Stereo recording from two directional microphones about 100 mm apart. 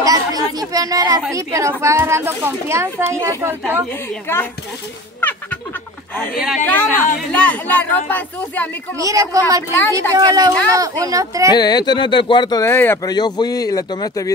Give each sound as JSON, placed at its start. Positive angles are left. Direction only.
{"t": 0.0, "sound": "a sound", "side_deg": -40}
{"t": 1.3, "sound": "a woman's voice", "side_deg": -30}
{"t": 3.9, "sound": "a woman's voice", "side_deg": 20}
{"t": 5.2, "sound": "fowl", "side_deg": 20}
{"t": 6.6, "sound": "speech", "side_deg": 20}
{"t": 8.9, "sound": "speech", "side_deg": -35}
{"t": 11.5, "sound": "speech", "side_deg": 45}
{"t": 12.6, "sound": "a woman's voice", "side_deg": 25}
{"t": 13.0, "sound": "speech", "side_deg": 45}